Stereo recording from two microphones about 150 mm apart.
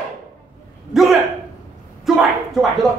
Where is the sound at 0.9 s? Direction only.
Centre (ahead or behind).